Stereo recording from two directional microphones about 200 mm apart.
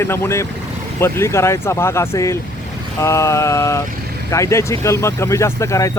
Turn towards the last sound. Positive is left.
turn(degrees=15)  # may be behind; listen again after turning